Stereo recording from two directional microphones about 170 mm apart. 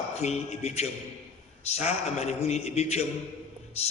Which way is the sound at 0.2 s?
40° left (ahead or behind).